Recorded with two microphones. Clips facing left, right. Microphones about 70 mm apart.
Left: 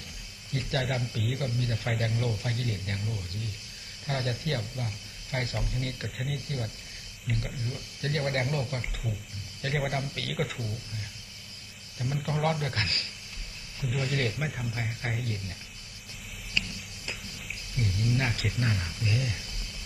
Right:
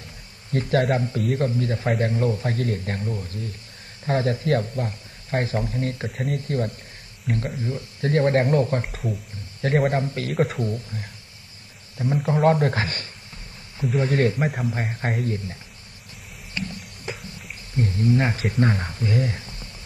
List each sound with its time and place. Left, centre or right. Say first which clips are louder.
0.5 s a man's voice: right 10 dB; right
9.6 s a man's voice: right 9 dB; right
10.4 s a man's voice: right 12 dB; right
12.3 s a man's voice: right 10 dB; right
14.5 s a man's voice: right 8 dB; right
16.5 s a sound: right 3 dB; right
17.7 s a man's voice: right 9 dB; right